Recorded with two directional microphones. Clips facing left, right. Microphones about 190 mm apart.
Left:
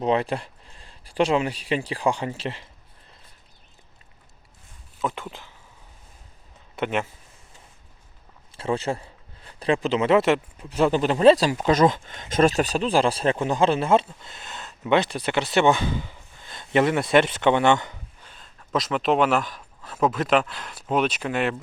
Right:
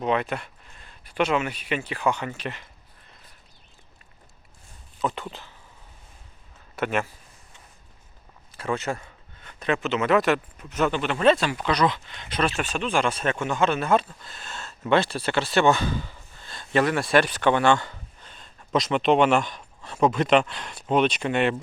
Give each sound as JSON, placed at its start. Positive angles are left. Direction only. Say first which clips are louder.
{"t": 0.0, "sound": "speech", "louder": "left 2 dB", "side_deg": 30}
{"t": 4.9, "sound": "speech", "louder": "even", "side_deg": 10}
{"t": 6.7, "sound": "speech", "louder": "even", "side_deg": 20}
{"t": 8.5, "sound": "speech", "louder": "left 2 dB", "side_deg": 30}
{"t": 18.3, "sound": "speech", "louder": "right 2 dB", "side_deg": 0}